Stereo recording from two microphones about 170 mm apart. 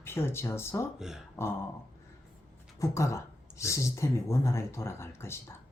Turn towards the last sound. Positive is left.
turn(degrees=15)  # may be behind; listen again after turning